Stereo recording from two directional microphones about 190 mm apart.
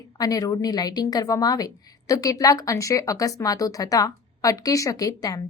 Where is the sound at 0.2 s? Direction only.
20° left (ahead or behind).